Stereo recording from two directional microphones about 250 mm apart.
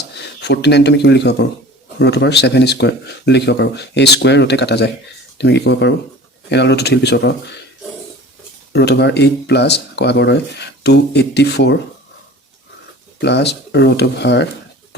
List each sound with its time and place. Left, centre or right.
0.4 s speech: left
8.7 s speech: left
13.2 s speech: left